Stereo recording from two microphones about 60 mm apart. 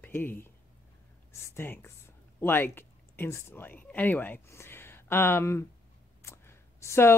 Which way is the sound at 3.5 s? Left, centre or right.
Left.